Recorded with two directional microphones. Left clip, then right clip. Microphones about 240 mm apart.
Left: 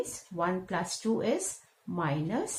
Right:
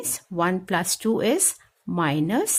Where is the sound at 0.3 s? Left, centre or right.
Right.